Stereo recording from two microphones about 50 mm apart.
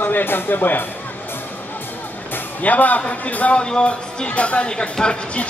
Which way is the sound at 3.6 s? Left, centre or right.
Centre.